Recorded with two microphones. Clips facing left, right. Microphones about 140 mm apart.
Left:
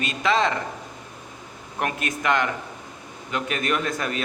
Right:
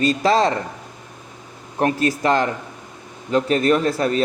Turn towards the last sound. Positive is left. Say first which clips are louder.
# right 8 dB
turn(degrees=-35)  # may be behind; listen again after turning